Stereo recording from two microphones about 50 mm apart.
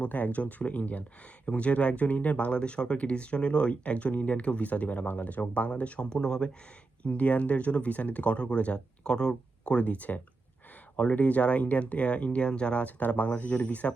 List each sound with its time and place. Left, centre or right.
0.0 s speech: left
6.1 s speech: centre
7.0 s speech: left
9.7 s speech: left